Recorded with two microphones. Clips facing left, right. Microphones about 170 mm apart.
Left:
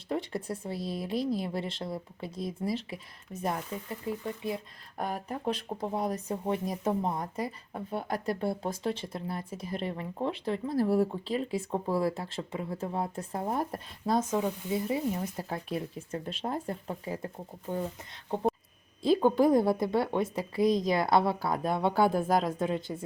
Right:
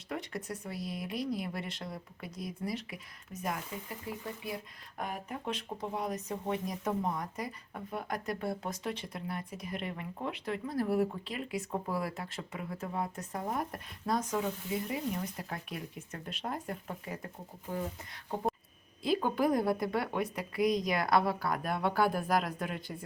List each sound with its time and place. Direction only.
0.1 s speech: 30° left (ahead or behind)
4.9 s speech: 35° left (ahead or behind)
19.0 s speech: 30° left (ahead or behind)